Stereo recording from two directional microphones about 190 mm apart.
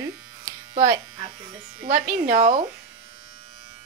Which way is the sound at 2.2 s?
40° right (ahead or behind).